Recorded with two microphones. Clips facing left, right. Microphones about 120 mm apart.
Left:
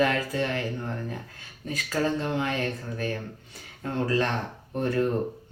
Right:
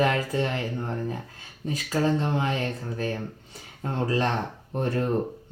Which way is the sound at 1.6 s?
25° right (ahead or behind).